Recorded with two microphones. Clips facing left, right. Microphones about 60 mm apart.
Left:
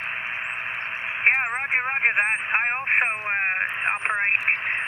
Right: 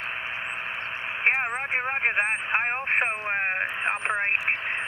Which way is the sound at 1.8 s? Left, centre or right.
Left.